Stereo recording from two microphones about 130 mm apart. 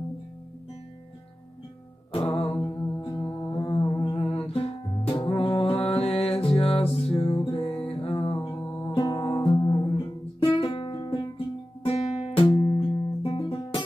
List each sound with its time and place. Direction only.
2.1 s music: 50° left (ahead or behind)
3.0 s music: 35° left (ahead or behind)